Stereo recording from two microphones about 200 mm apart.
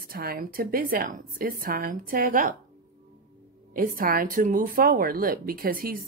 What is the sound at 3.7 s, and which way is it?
Speech, 45° right (ahead or behind).